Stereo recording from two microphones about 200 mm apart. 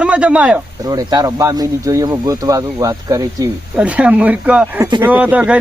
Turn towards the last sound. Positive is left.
turn(degrees=-5)  # may be behind; listen again after turning